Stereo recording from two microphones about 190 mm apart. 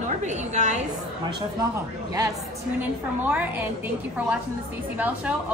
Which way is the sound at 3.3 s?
10° right (ahead or behind).